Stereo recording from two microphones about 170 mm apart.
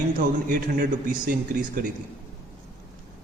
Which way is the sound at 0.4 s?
60° right (ahead or behind).